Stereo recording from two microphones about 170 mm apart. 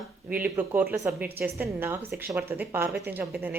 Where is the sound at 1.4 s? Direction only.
10° right (ahead or behind).